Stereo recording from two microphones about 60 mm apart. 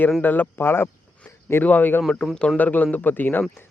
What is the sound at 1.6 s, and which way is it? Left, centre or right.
Speech, left.